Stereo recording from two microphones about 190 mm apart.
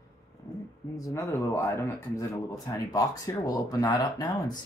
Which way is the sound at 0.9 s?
15° left (ahead or behind).